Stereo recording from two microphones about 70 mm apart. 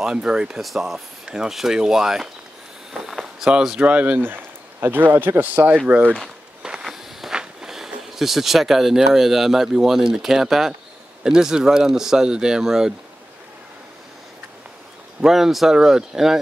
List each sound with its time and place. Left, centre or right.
0.0 s speech: centre
2.9 s a sound: centre
3.5 s speech: centre
6.6 s speech: centre
15.2 s speech: centre